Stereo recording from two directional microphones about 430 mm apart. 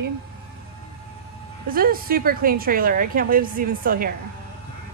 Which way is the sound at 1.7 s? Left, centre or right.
Centre.